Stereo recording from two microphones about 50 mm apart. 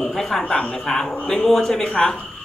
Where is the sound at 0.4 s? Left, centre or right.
Centre.